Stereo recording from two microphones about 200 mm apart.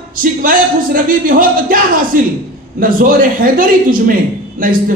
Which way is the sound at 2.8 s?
45° right (ahead or behind).